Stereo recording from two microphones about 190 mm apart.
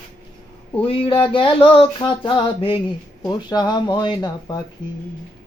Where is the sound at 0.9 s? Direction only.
30° left (ahead or behind).